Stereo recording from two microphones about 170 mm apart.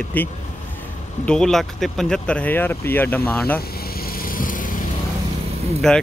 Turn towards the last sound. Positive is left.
turn(degrees=5)  # may be behind; listen again after turning